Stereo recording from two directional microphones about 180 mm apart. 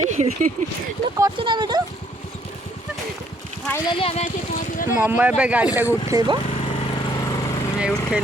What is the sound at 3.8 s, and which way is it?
Speech, 30° left (ahead or behind).